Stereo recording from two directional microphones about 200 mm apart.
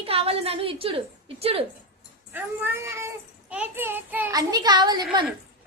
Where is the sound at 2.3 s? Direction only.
10° right (ahead or behind).